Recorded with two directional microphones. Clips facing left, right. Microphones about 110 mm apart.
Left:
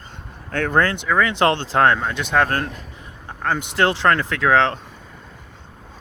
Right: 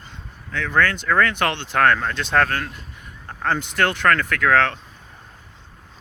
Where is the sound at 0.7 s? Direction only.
30° left (ahead or behind).